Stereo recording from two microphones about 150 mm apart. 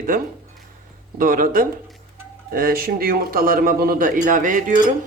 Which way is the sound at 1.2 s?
70° right (ahead or behind).